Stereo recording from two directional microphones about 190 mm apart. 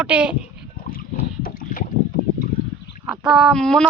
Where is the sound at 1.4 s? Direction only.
45° left (ahead or behind).